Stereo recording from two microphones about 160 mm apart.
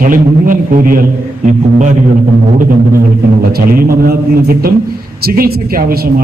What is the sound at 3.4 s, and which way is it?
A man's voice, 70° right (ahead or behind).